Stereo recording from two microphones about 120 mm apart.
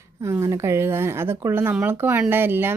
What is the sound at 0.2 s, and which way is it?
Speech, 25° right (ahead or behind).